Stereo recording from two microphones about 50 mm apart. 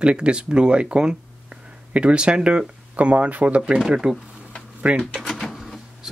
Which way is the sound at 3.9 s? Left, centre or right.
Centre.